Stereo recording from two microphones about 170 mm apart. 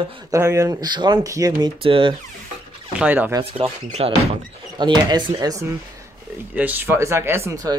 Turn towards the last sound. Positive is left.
turn(degrees=-20)  # may be behind; listen again after turning